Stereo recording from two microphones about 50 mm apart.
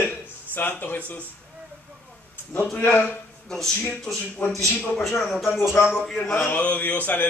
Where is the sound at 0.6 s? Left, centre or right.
Left.